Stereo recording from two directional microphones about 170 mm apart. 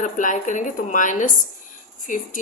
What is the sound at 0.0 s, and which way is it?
A woman's voice, 50° left (ahead or behind).